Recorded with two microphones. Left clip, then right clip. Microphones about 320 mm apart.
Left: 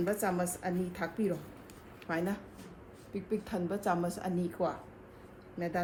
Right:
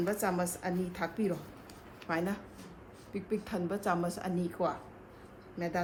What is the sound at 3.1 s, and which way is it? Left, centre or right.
A woman's voice, centre.